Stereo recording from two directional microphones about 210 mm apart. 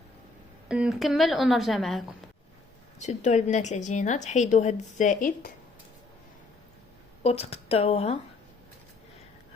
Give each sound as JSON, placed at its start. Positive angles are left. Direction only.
{"t": 0.7, "sound": "a woman's voice", "side_deg": -5}
{"t": 3.0, "sound": "a woman's voice", "side_deg": 35}
{"t": 7.2, "sound": "a woman's voice", "side_deg": 30}